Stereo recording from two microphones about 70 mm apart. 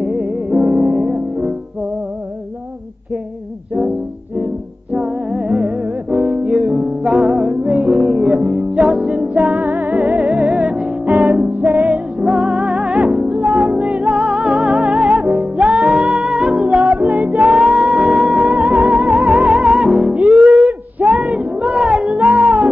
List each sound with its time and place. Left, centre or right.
0.1 s music: centre
0.7 s music: right
4.9 s music: centre
6.4 s music: centre
7.5 s music: centre
7.9 s music: centre
9.0 s music: centre
9.4 s music: centre
13.7 s music: centre
16.6 s music: centre
17.4 s music: centre
20.2 s a sound: centre
22.3 s music: right